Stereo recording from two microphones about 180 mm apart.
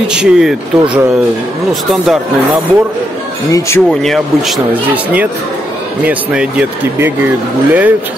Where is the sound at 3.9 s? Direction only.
Centre (ahead or behind).